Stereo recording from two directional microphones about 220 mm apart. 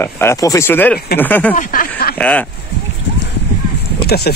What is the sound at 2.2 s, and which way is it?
Speech, 5° left (ahead or behind).